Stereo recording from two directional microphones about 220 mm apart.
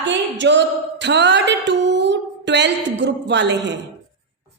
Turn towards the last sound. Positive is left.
turn(degrees=-50)  # may be behind; listen again after turning